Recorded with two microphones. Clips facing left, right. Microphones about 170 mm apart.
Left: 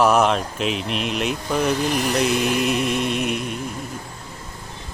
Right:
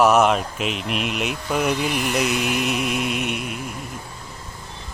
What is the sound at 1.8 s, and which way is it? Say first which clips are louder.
Mantra: left 2 dB; 40° left (ahead or behind).